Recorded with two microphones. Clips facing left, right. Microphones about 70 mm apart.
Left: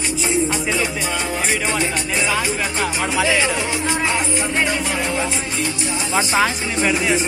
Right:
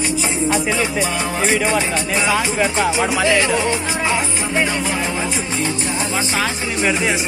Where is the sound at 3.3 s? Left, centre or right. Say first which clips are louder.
Right 3 dB; centre.